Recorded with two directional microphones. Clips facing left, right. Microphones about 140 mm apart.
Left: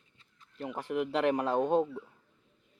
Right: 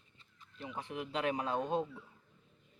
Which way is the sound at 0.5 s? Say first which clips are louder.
Left 8 dB; 60° left (ahead or behind).